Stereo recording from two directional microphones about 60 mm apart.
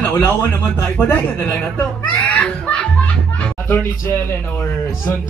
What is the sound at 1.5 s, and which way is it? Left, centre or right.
Music, left.